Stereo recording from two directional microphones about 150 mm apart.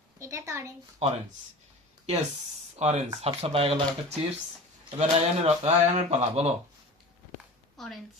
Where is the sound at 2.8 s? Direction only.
50° right (ahead or behind).